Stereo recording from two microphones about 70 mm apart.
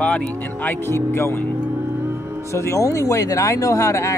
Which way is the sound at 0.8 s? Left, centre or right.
Left.